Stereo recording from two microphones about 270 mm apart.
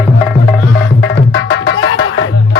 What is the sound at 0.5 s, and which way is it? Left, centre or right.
Music, left.